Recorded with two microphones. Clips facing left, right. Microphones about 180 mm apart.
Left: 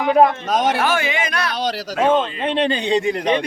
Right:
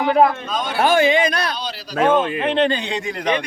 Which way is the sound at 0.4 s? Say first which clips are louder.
Left 7 dB; 90° left.